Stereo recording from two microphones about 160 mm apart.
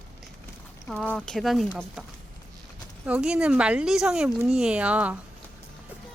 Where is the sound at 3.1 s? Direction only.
5° right (ahead or behind).